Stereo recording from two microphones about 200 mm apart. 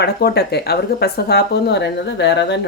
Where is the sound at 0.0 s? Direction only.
55° left (ahead or behind).